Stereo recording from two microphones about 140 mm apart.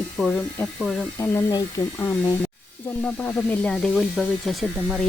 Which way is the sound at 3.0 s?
10° left (ahead or behind).